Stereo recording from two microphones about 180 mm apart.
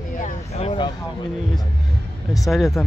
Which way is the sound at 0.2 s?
40° left (ahead or behind).